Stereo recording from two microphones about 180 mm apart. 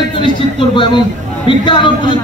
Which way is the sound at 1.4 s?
25° left (ahead or behind).